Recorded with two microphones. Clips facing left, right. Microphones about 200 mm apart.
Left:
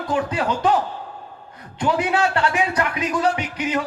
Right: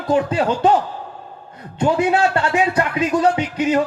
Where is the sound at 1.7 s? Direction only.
25° right (ahead or behind).